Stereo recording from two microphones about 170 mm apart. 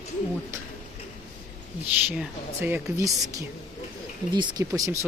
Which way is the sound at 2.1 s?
10° right (ahead or behind).